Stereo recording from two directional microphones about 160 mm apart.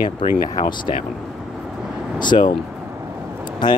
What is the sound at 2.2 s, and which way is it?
Speech, 30° left (ahead or behind).